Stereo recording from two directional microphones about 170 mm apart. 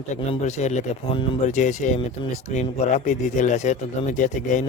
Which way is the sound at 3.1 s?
45° left (ahead or behind).